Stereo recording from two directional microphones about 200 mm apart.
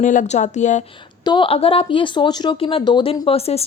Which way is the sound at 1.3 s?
25° left (ahead or behind).